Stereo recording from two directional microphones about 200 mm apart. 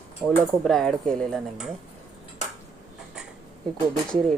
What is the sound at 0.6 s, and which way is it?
Speech, centre (ahead or behind).